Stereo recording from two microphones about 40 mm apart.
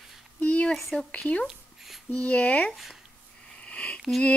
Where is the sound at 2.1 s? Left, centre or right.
Left.